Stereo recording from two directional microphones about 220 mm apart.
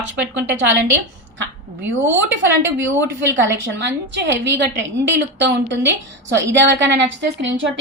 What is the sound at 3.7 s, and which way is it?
A woman's voice, 50° right (ahead or behind).